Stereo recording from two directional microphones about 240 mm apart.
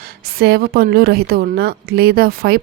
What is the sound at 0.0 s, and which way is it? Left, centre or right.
A woman's voice, right.